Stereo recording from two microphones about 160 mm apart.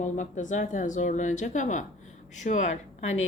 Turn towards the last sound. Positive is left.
turn(degrees=45)  # may be behind; listen again after turning